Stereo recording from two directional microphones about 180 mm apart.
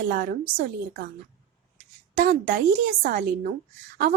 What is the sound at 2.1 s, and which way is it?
A woman's voice, 55° right (ahead or behind).